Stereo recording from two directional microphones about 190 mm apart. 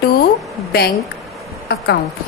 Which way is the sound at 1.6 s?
55° left (ahead or behind).